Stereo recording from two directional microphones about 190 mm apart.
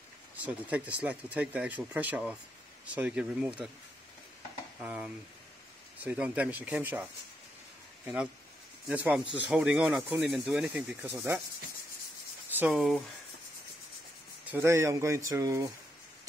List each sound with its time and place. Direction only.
0.4 s speech: 10° right (ahead or behind)
4.8 s speech: 5° right (ahead or behind)
8.8 s speech: 5° right (ahead or behind)
12.5 s speech: 5° right (ahead or behind)
14.5 s speech: 15° right (ahead or behind)